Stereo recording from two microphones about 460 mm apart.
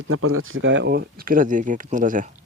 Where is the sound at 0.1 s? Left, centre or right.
Right.